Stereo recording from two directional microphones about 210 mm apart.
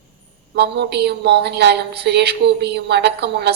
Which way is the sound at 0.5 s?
50° right (ahead or behind).